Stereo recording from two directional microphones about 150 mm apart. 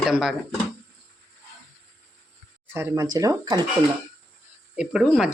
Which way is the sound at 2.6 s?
15° right (ahead or behind).